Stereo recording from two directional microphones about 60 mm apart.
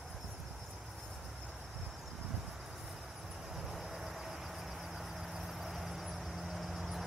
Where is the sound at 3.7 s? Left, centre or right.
Centre.